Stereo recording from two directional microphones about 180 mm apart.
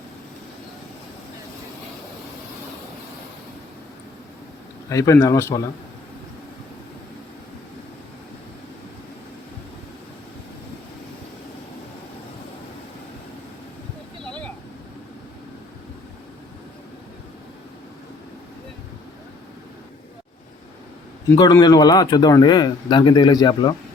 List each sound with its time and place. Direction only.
4.9 s speech: 20° left (ahead or behind)
21.3 s speech: 20° left (ahead or behind)